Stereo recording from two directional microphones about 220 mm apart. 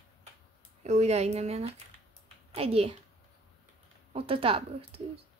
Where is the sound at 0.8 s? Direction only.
30° right (ahead or behind).